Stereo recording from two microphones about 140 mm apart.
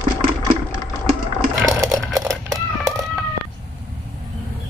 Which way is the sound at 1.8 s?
25° right (ahead or behind).